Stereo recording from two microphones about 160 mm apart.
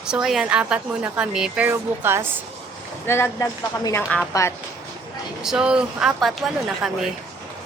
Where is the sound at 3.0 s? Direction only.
15° left (ahead or behind).